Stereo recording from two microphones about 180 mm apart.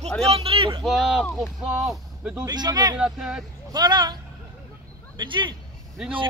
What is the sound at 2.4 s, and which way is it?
Speech, 25° right (ahead or behind).